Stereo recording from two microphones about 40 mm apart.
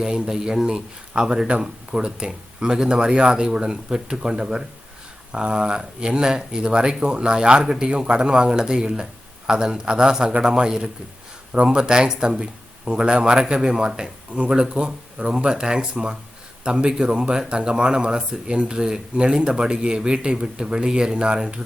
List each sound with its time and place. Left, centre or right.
0.0 s speech: centre
1.5 s speech: right